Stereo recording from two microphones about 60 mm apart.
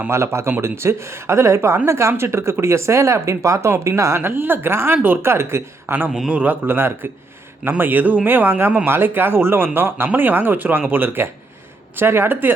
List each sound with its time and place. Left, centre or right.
0.1 s speech: right
4.2 s speech: right
6.1 s a man's voice: centre
6.3 s speech: right